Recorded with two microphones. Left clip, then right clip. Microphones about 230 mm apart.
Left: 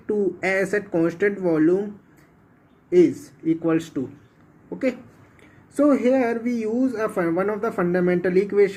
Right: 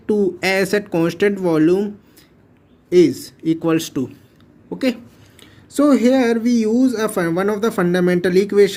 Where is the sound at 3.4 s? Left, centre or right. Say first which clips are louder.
Right 4 dB; right.